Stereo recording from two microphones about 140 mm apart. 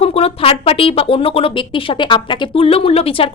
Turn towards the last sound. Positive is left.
turn(degrees=40)  # may be behind; listen again after turning